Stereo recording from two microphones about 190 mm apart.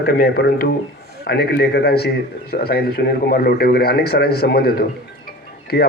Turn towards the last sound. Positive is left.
turn(degrees=55)  # may be behind; listen again after turning